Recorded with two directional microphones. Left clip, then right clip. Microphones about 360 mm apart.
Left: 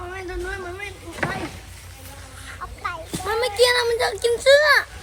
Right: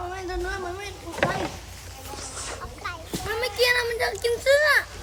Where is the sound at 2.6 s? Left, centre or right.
Centre.